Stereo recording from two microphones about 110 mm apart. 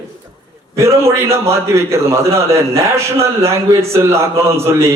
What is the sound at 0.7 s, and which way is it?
A man's voice, 25° right (ahead or behind).